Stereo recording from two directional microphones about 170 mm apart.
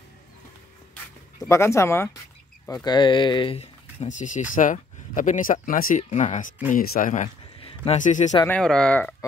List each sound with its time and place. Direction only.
1.5 s speech: 15° left (ahead or behind); by 6.5 s 45° left (ahead or behind)
6.7 s speech: 55° left (ahead or behind)
7.6 s a sound: 35° left (ahead or behind)
8.0 s speech: 45° left (ahead or behind)
8.5 s speech: 5° left (ahead or behind)